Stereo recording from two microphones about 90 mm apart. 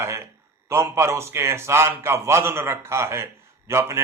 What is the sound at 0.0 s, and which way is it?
A man's voice, 30° right (ahead or behind).